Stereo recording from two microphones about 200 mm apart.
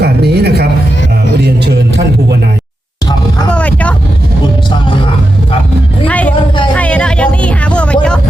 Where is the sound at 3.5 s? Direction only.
5° left (ahead or behind).